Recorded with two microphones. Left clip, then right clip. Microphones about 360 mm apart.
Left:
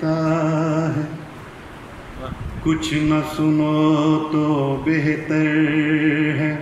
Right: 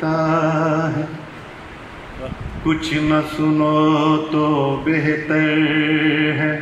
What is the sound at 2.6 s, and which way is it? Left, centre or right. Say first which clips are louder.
Mantra: right 1 dB; right.